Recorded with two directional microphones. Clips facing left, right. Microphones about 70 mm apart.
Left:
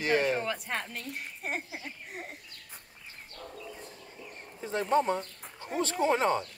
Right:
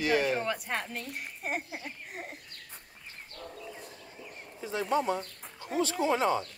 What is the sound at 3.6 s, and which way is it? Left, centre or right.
Bird, centre.